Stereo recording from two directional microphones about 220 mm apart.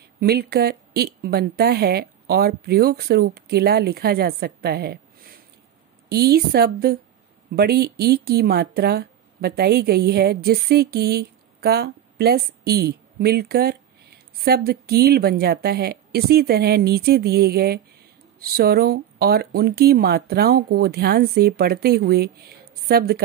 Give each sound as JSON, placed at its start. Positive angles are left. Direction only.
{"t": 0.0, "sound": "speech", "side_deg": -45}